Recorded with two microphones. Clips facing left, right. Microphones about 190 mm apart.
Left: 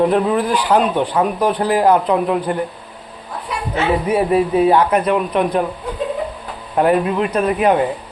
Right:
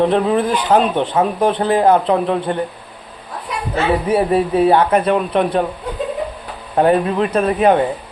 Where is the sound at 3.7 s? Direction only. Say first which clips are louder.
Right 1 dB; 30° right (ahead or behind).